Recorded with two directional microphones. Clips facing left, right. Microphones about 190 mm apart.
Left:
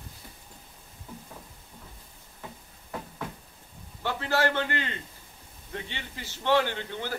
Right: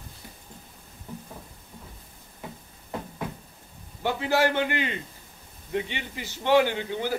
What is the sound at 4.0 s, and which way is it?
A man's voice, 15° right (ahead or behind).